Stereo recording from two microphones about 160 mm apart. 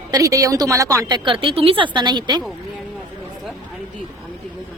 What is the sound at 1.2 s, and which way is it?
A woman's voice, 35° right (ahead or behind).